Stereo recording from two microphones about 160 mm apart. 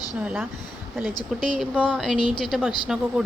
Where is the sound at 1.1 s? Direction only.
30° left (ahead or behind).